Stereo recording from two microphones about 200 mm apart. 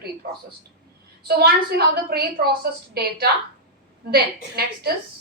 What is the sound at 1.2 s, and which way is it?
A woman's voice, 50° right (ahead or behind).